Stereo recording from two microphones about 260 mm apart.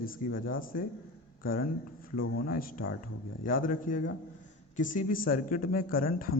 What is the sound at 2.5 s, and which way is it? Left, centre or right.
A man's voice, left.